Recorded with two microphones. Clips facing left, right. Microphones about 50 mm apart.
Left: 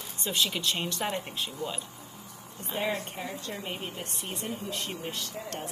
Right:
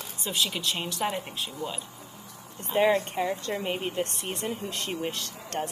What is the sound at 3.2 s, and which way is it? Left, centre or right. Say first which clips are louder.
Speech: right 8 dB; right.